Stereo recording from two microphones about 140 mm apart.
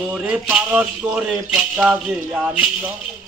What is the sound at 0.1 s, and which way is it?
Speech, 5° right (ahead or behind).